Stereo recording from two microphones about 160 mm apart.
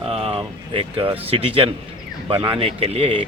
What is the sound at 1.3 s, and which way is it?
Speech, 35° right (ahead or behind).